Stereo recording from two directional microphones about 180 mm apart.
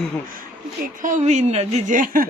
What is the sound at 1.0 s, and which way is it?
Speech, 40° right (ahead or behind).